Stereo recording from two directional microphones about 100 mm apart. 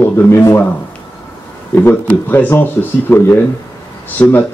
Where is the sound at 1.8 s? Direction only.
20° left (ahead or behind).